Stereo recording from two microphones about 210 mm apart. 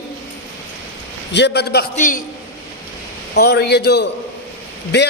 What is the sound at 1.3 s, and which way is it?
Speech, 55° left (ahead or behind).